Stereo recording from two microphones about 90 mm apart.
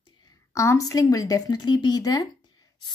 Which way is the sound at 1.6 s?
55° left (ahead or behind).